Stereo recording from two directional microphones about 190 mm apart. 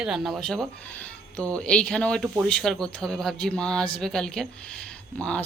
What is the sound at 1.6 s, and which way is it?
A woman's voice, 5° left (ahead or behind).